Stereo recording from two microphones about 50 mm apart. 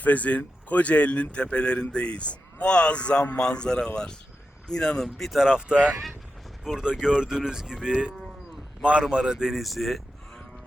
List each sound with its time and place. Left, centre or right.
0.0 s speech: left; by 5.0 s centre
5.3 s speech: centre